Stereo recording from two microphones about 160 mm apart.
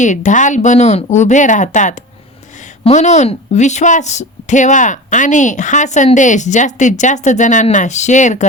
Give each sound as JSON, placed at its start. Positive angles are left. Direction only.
{"t": 0.0, "sound": "a woman's voice", "side_deg": 50}